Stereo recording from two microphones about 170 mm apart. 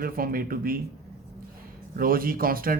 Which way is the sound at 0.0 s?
60° right (ahead or behind).